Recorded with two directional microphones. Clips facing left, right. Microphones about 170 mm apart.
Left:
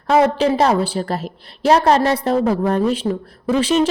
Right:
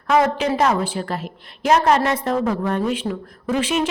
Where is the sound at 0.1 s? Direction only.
30° left (ahead or behind).